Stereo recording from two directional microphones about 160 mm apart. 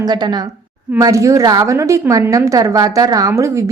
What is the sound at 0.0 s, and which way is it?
A woman's voice, 25° right (ahead or behind).